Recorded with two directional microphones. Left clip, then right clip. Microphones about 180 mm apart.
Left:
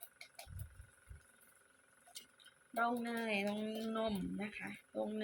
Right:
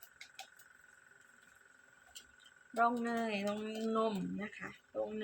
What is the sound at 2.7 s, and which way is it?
Speech, 20° right (ahead or behind).